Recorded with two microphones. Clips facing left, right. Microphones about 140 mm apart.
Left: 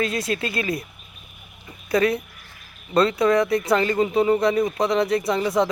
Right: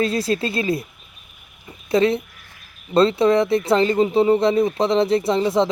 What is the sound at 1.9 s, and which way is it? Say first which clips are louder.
Speech: right 3 dB; 25° right (ahead or behind).